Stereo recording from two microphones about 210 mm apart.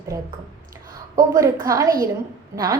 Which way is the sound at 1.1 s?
15° right (ahead or behind).